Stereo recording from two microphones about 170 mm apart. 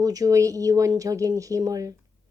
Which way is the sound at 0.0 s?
20° right (ahead or behind).